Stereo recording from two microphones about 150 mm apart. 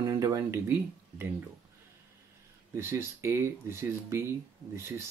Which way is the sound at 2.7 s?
20° right (ahead or behind).